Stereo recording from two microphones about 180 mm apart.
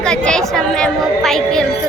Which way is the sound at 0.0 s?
5° left (ahead or behind).